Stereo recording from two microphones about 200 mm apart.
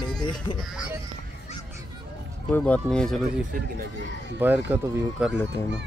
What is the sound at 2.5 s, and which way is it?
Speech, 5° left (ahead or behind).